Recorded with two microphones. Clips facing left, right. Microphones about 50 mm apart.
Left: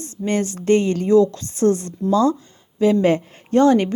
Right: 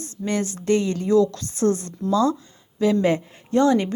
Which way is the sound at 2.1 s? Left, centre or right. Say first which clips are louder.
Left 3 dB; left.